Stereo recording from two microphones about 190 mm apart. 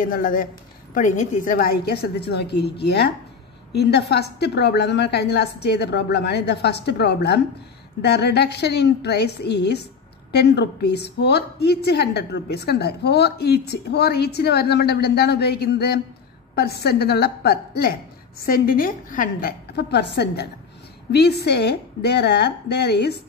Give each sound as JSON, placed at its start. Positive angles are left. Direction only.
{"t": 0.0, "sound": "a woman's voice", "side_deg": 45}